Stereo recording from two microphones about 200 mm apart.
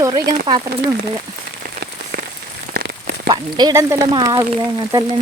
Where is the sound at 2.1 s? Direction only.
55° right (ahead or behind).